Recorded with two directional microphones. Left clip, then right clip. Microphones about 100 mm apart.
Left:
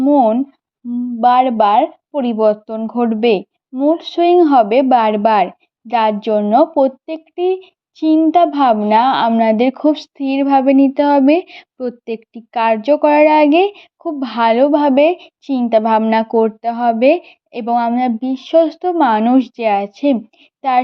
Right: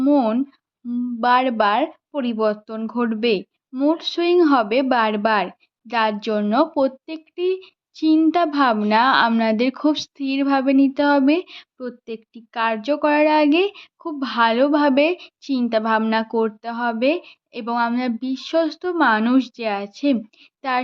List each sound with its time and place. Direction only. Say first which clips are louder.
0.0 s speech: left 6 dB; 10° left (ahead or behind); by 3.4 s 25° left (ahead or behind)
3.8 s a woman's voice: left 6 dB; 10° left (ahead or behind); by 20.1 s 30° left (ahead or behind)
20.6 s child singing: left 8 dB; 25° left (ahead or behind)